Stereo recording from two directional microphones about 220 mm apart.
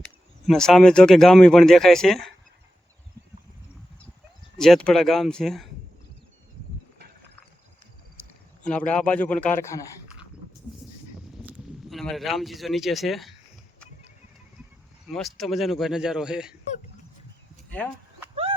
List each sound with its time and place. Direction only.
0.4 s speech: centre (ahead or behind)
4.5 s speech: centre (ahead or behind)
8.6 s a man's voice: 5° left (ahead or behind)
11.9 s speech: centre (ahead or behind)
15.0 s speech: centre (ahead or behind)